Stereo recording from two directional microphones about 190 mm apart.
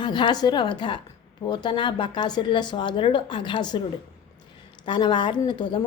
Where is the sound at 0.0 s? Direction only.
25° left (ahead or behind).